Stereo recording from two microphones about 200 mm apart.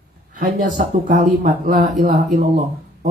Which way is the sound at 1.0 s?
45° right (ahead or behind).